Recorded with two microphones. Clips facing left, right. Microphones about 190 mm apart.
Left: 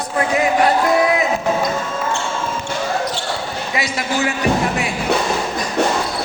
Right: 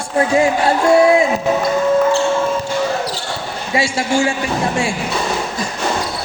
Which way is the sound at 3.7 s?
30° right (ahead or behind).